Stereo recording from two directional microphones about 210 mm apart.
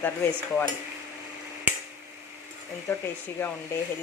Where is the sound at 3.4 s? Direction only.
10° left (ahead or behind).